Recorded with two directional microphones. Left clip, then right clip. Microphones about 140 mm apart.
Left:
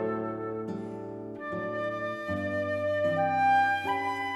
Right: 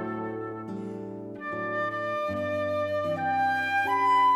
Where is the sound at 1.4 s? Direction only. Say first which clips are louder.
Right 3 dB; 45° right (ahead or behind).